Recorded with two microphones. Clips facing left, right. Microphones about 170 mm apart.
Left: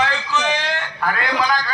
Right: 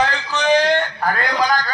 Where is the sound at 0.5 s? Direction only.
40° right (ahead or behind).